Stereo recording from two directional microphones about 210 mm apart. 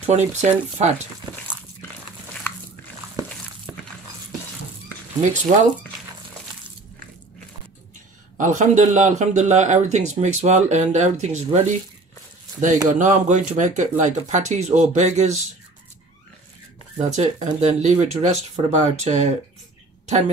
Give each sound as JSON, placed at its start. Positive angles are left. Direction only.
{"t": 0.1, "sound": "speech", "side_deg": -35}
{"t": 5.2, "sound": "speech", "side_deg": -35}
{"t": 8.4, "sound": "speech", "side_deg": -35}
{"t": 16.9, "sound": "speech", "side_deg": -35}